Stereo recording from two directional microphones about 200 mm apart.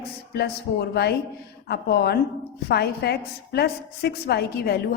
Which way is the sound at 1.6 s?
55° left (ahead or behind).